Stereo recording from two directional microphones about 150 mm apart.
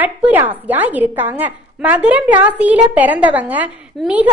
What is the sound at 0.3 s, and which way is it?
A woman's voice, 10° right (ahead or behind).